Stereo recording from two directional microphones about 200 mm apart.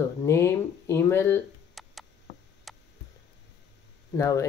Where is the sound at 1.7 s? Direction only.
Centre (ahead or behind).